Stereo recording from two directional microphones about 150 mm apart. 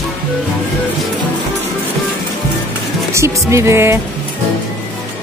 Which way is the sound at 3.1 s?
20° right (ahead or behind).